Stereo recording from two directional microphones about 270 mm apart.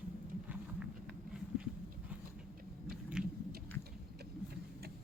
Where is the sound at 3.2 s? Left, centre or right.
Centre.